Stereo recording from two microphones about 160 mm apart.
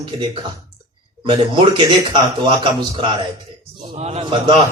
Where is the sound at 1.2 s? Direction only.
30° right (ahead or behind).